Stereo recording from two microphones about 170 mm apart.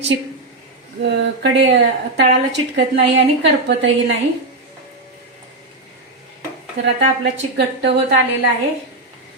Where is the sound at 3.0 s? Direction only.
90° right.